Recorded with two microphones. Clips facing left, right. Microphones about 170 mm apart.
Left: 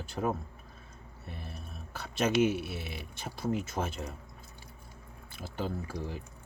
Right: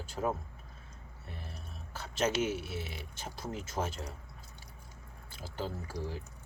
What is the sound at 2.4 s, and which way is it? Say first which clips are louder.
Speech: left 6 dB; 55° left (ahead or behind).